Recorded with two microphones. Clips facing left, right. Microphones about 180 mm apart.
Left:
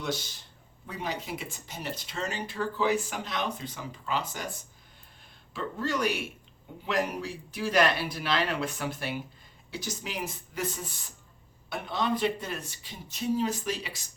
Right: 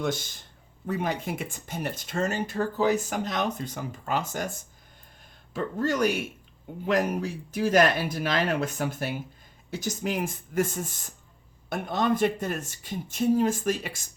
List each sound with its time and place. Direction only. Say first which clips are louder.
0.0 s speech: right 4 dB; 50° right (ahead or behind)
5.5 s speech: right 5 dB; 45° right (ahead or behind)